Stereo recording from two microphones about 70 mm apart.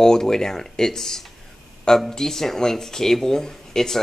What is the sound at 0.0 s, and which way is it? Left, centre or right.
Speech, centre.